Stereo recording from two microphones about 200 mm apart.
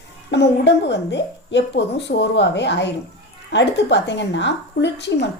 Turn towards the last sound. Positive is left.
turn(degrees=60)  # may be behind; listen again after turning